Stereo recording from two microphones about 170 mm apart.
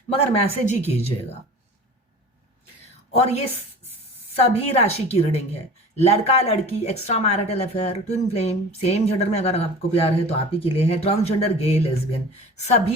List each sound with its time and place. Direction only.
0.1 s speech: 35° left (ahead or behind)
3.2 s speech: 40° left (ahead or behind)
4.5 s speech: 35° left (ahead or behind)